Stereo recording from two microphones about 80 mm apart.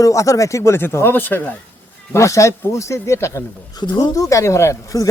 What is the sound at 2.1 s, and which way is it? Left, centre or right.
A man's voice, left.